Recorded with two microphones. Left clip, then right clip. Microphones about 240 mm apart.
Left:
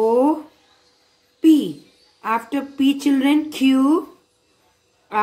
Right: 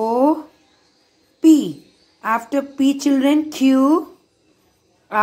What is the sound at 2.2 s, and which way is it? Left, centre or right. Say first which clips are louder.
A woman's voice: right 3 dB; centre.